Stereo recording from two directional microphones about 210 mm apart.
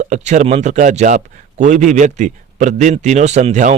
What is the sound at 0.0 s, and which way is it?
Speech, 35° right (ahead or behind).